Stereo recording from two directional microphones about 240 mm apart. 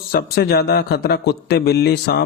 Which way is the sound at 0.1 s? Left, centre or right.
Left.